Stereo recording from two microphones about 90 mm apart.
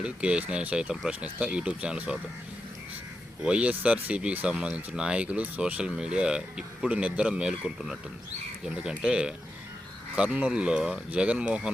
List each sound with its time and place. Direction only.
0.0 s speech: 10° right (ahead or behind)
3.4 s speech: 15° right (ahead or behind)